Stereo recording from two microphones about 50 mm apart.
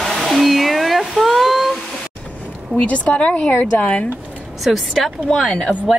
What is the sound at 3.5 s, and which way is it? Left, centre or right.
Speech, left.